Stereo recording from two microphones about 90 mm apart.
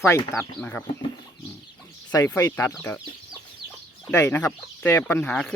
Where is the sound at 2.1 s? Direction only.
45° left (ahead or behind).